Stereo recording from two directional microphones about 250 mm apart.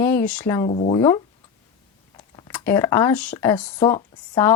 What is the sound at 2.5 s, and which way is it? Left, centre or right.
Speech, centre.